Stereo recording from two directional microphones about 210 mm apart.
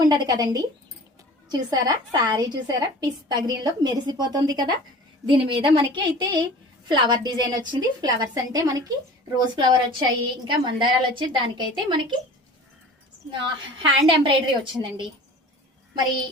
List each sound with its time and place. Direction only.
0.1 s a woman's voice: 20° right (ahead or behind)
13.8 s a woman's voice: 25° right (ahead or behind)